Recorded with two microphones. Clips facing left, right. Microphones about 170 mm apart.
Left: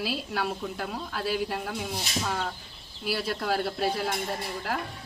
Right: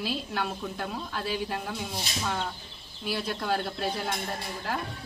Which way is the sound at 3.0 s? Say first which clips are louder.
Left 1 dB; 5° left (ahead or behind).